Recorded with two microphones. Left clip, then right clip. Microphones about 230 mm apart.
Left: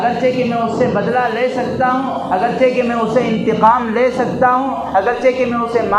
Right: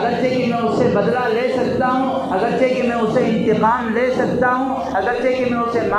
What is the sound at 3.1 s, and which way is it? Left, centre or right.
Speech, left.